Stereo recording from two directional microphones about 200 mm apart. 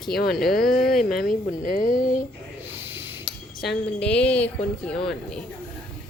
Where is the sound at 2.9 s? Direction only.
5° right (ahead or behind).